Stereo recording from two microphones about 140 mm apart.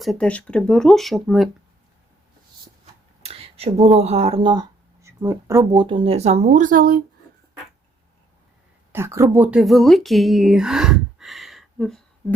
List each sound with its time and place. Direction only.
0.0 s speech: 5° left (ahead or behind)
3.2 s a sound: 45° right (ahead or behind)
5.2 s speech: 20° right (ahead or behind)
5.7 s speech: 35° right (ahead or behind); by 7.0 s 90° right
8.9 s speech: 20° right (ahead or behind); by 12.0 s centre (ahead or behind)